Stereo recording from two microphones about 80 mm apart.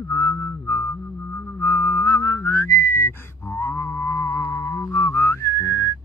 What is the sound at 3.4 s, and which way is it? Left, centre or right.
Music, left.